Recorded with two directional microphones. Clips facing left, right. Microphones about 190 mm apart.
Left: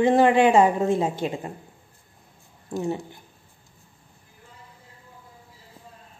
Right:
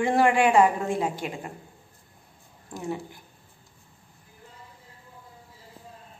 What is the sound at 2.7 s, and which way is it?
Speech, 25° left (ahead or behind).